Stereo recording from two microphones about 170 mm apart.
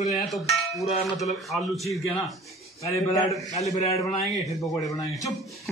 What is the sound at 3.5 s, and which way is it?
Speech, 40° left (ahead or behind).